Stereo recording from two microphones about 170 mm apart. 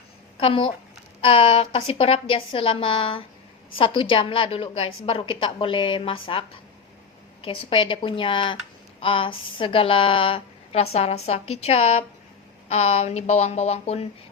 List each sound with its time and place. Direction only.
0.3 s a woman's voice: 30° left (ahead or behind)
7.4 s a woman's voice: 30° left (ahead or behind)